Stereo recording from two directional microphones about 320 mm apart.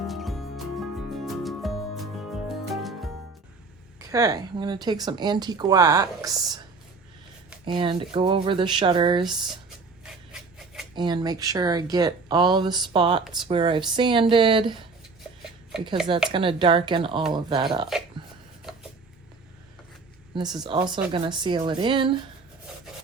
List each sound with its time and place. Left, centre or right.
0.1 s music: centre
4.1 s a woman's voice: centre
7.6 s a woman's voice: centre
9.2 s a sound: centre
10.9 s a woman's voice: centre
16.3 s a woman's voice: centre
20.3 s a woman's voice: centre